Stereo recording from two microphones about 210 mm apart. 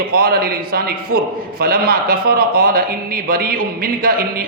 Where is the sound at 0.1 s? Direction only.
45° right (ahead or behind).